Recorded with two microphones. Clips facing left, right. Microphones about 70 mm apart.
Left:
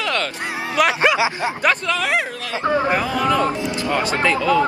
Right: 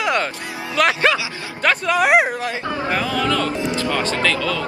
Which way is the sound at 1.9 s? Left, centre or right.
Right.